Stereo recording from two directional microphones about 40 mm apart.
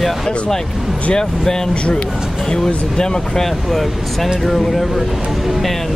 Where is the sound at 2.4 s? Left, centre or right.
Centre.